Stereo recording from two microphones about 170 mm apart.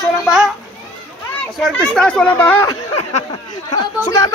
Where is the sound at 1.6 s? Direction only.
5° left (ahead or behind).